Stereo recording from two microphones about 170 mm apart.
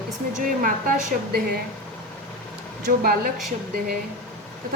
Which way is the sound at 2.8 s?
60° right (ahead or behind).